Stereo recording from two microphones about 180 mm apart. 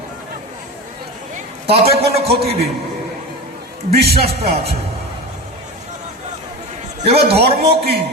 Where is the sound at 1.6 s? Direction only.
35° right (ahead or behind).